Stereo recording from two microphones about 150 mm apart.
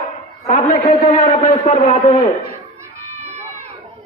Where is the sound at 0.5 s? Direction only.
45° left (ahead or behind).